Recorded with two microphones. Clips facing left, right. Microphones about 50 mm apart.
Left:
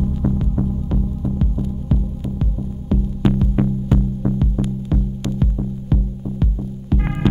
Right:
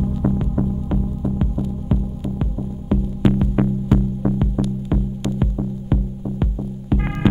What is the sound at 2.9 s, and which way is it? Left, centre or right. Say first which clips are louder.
Music: right 1 dB; centre.